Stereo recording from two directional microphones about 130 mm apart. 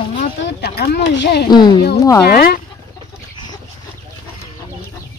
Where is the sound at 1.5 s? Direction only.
35° left (ahead or behind).